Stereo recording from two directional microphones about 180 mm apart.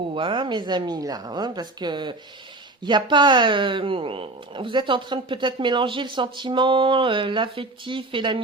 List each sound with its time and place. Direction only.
0.1 s speech: 30° right (ahead or behind)